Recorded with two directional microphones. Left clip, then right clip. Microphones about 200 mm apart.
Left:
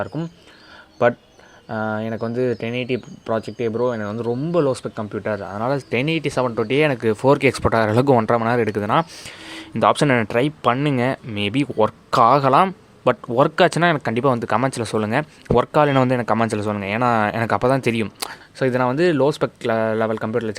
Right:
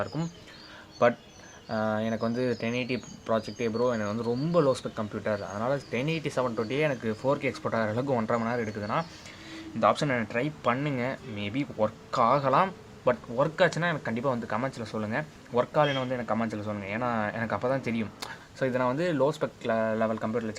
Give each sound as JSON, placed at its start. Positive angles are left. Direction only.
{"t": 0.0, "sound": "speech", "side_deg": 30}
{"t": 1.6, "sound": "speech", "side_deg": 35}